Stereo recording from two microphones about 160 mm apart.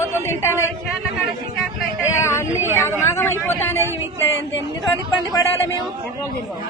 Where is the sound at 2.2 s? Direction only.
15° left (ahead or behind).